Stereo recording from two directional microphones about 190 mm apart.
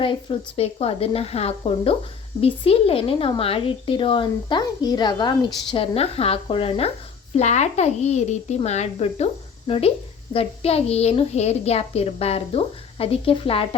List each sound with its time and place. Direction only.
0.0 s a child's voice: 25° left (ahead or behind)